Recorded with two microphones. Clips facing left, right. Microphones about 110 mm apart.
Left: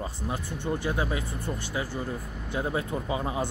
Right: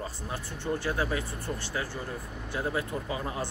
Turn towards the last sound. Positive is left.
turn(degrees=20)  # may be behind; listen again after turning